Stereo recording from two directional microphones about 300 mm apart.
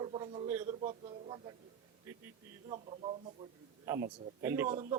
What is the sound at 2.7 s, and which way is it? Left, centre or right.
A man's voice, centre.